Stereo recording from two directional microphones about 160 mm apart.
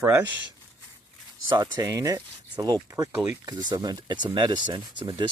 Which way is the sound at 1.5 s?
25° right (ahead or behind).